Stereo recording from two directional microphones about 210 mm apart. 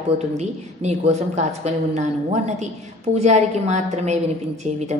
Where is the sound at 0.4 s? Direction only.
30° right (ahead or behind).